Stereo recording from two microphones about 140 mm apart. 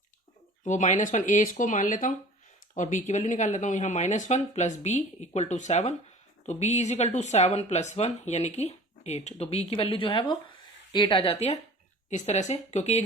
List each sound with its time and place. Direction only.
0.6 s speech: 60° left (ahead or behind)
12.1 s speech: 55° left (ahead or behind)